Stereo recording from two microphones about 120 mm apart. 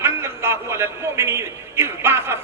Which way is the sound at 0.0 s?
20° right (ahead or behind).